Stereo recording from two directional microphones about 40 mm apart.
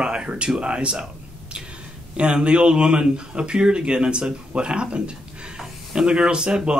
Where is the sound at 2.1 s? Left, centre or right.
Right.